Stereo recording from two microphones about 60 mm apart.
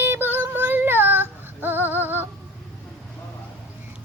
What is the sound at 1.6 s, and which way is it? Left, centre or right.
Music, right.